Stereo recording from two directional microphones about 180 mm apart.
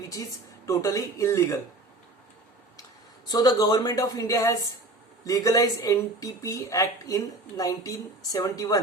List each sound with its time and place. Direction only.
0.1 s speech: 20° left (ahead or behind)
3.2 s speech: 25° left (ahead or behind)